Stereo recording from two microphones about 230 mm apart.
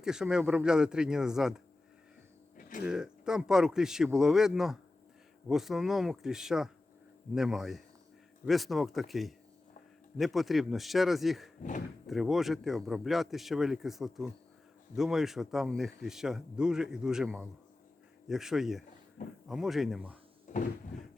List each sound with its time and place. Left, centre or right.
0.0 s speech: centre
2.6 s a sound: left
2.8 s speech: centre
20.5 s cupboard open or close: left